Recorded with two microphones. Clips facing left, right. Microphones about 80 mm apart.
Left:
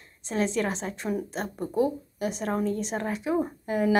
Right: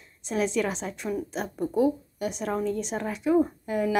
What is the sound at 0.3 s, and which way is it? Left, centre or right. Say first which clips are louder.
Speech: right 1 dB; centre.